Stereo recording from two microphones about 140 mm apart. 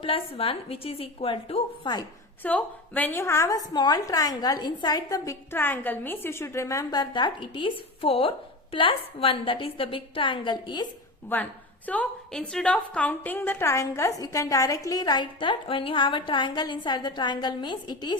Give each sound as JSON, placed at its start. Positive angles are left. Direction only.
{"t": 0.0, "sound": "a woman's voice", "side_deg": 40}
{"t": 2.4, "sound": "a woman's voice", "side_deg": 10}
{"t": 11.3, "sound": "a woman's voice", "side_deg": 15}